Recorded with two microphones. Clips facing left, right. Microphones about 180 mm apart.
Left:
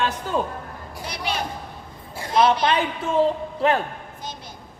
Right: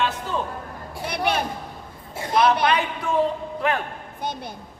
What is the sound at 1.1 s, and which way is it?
Speech, 55° right (ahead or behind).